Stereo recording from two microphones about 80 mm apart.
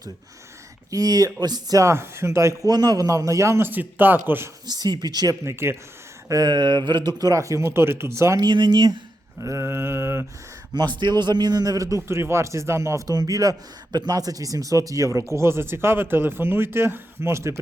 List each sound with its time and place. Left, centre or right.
0.9 s a man's voice: right
1.8 s speech: right
2.6 s a man's voice: right
3.7 s speech: right
4.6 s a sound: right
5.5 s speech: right
6.2 s a sound: right
7.2 s speech: right
8.4 s speech: right
9.4 s speech: right
10.8 s a man's voice: right
13.1 s speech: right